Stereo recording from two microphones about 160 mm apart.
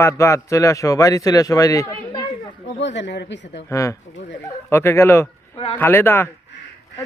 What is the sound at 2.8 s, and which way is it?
Speech, 90° left.